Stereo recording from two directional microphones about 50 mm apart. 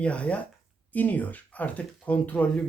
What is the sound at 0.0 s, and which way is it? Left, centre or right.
Speech, left.